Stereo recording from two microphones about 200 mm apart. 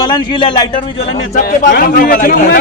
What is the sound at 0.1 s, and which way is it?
Speech, 25° left (ahead or behind).